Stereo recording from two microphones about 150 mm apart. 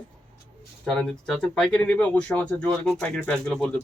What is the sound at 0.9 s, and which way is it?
Speech, 5° left (ahead or behind).